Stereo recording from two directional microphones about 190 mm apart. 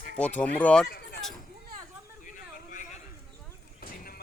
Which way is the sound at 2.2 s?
45° left (ahead or behind).